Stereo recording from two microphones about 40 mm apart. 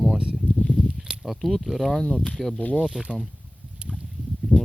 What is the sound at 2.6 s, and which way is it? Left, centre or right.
Speech, left.